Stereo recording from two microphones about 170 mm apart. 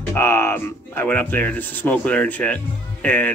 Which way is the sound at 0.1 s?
15° left (ahead or behind).